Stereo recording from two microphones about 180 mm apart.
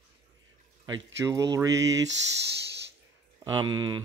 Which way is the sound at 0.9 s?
20° right (ahead or behind).